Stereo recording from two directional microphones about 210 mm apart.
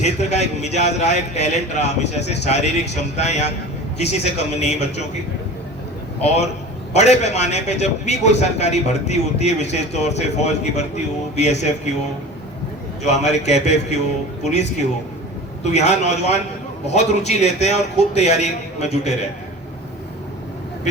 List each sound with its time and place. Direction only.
0.0 s a man's voice: 30° left (ahead or behind)
6.2 s a man's voice: 30° left (ahead or behind)
13.0 s a man's voice: 30° left (ahead or behind)